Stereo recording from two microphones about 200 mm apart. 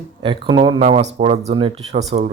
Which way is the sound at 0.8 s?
35° right (ahead or behind).